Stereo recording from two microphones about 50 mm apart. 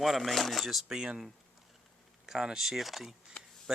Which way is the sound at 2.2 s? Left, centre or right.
Centre.